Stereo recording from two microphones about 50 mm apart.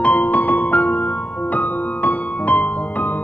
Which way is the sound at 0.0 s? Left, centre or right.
Left.